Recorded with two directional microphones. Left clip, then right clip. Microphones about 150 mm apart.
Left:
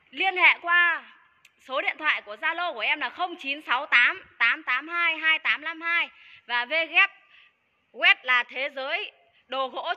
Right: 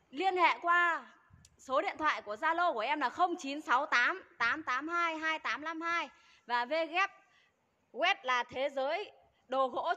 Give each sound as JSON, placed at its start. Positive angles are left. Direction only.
{"t": 0.1, "sound": "a woman's voice", "side_deg": -35}